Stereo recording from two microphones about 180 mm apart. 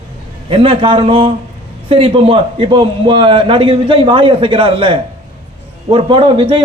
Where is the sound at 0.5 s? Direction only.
30° right (ahead or behind).